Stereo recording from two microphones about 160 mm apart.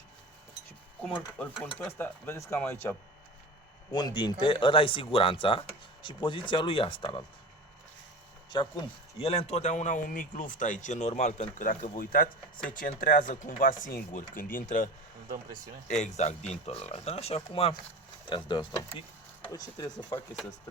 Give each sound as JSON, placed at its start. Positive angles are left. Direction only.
{"t": 1.0, "sound": "speech", "side_deg": 10}
{"t": 1.5, "sound": "speech", "side_deg": -5}
{"t": 2.0, "sound": "speech", "side_deg": 15}
{"t": 3.9, "sound": "speech", "side_deg": 25}
{"t": 8.4, "sound": "speech", "side_deg": 25}
{"t": 15.9, "sound": "speech", "side_deg": 45}